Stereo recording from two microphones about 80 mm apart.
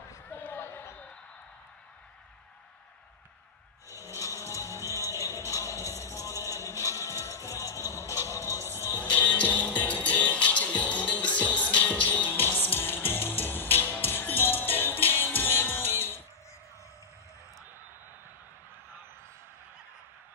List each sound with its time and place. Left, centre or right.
0.3 s a sound: left
4.1 s music: left
9.0 s music: centre